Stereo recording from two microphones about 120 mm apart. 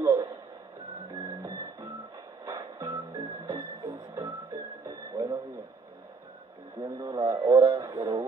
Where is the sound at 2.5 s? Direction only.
25° right (ahead or behind).